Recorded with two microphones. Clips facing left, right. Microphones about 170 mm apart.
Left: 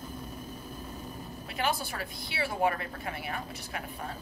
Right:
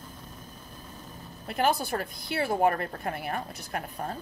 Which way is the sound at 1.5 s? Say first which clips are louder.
Right 6 dB; 50° right (ahead or behind).